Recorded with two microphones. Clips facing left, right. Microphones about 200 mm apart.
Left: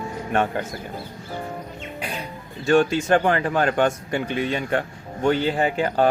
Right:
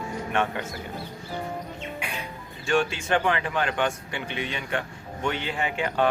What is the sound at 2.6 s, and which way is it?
A man's voice, 40° left (ahead or behind).